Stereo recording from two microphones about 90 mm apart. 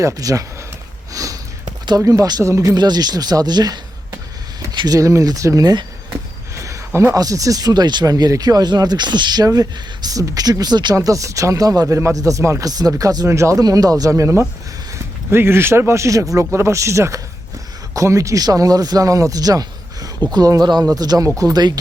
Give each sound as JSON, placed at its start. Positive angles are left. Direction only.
{"t": 0.0, "sound": "speech", "side_deg": -40}
{"t": 1.1, "sound": "sniff", "side_deg": -40}
{"t": 2.0, "sound": "speech", "side_deg": -40}
{"t": 2.7, "sound": "speech", "side_deg": -50}
{"t": 4.7, "sound": "a sound", "side_deg": -60}
{"t": 4.9, "sound": "speech", "side_deg": -35}
{"t": 6.6, "sound": "a sound", "side_deg": -35}
{"t": 7.2, "sound": "speech", "side_deg": -40}
{"t": 10.9, "sound": "speech", "side_deg": -40}